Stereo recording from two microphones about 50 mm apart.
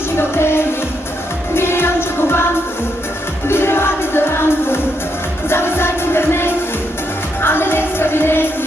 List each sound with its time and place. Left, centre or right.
0.2 s music: left
3.5 s music: left